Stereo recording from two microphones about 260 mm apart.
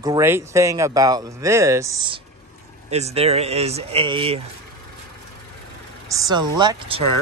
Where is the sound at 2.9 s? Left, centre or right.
Right.